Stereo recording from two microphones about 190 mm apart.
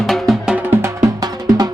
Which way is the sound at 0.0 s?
Centre (ahead or behind).